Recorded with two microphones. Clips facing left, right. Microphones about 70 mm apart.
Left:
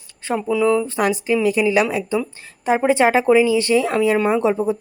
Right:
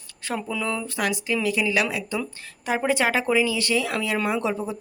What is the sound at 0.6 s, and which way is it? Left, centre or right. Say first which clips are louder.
A woman's voice: left 10 dB; left.